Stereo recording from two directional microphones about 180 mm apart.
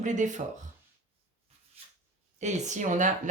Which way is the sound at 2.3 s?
40° right (ahead or behind).